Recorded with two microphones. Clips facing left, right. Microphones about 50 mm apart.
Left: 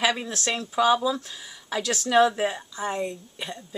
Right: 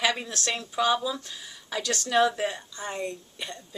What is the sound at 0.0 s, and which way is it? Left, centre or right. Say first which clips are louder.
Speech: left 2 dB; centre.